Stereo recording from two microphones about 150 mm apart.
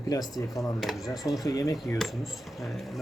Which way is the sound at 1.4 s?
25° left (ahead or behind).